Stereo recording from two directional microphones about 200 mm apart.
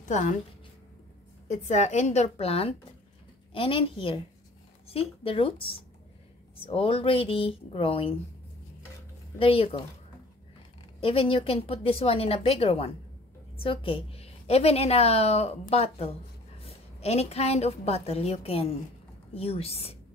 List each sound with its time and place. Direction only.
1.5 s a woman's voice: 35° left (ahead or behind)
9.4 s speech: 30° left (ahead or behind)
11.0 s a woman's voice: 30° left (ahead or behind)